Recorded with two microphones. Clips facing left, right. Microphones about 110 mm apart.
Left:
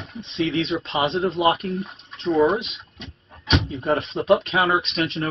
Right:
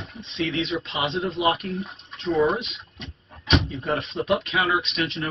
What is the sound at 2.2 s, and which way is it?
Speech, 30° left (ahead or behind).